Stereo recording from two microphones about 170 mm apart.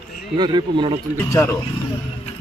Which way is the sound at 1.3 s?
15° left (ahead or behind).